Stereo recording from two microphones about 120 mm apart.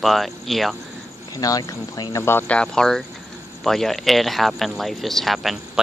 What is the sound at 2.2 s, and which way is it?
Speech, 15° left (ahead or behind).